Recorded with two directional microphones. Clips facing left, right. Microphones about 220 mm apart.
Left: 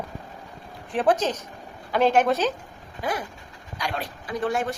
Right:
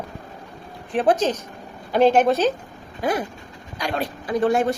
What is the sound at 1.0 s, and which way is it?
Speech, 15° right (ahead or behind).